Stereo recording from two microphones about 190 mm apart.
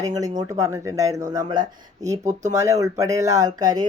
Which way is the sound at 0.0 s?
20° right (ahead or behind).